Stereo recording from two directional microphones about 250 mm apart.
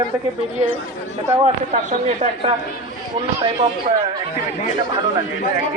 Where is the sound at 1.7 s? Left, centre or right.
Right.